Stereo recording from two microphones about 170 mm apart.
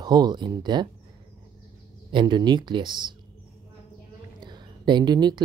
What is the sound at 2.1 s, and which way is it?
Speech, 25° right (ahead or behind).